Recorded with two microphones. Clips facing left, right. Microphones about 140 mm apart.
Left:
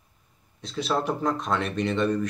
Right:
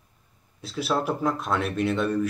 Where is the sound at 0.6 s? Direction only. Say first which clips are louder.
Even; 5° right (ahead or behind).